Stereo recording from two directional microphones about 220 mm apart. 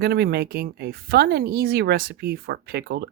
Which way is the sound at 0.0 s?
45° right (ahead or behind).